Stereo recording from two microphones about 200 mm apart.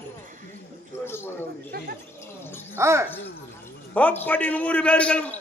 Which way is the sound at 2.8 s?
15° right (ahead or behind).